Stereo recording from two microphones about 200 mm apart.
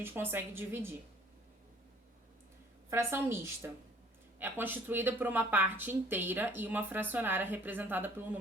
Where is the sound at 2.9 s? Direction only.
10° right (ahead or behind).